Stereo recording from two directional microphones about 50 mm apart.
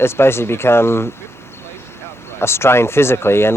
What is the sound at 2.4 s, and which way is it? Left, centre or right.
Speech, left.